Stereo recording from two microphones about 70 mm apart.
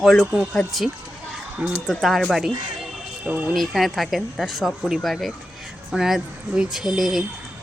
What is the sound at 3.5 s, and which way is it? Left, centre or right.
Speech, centre.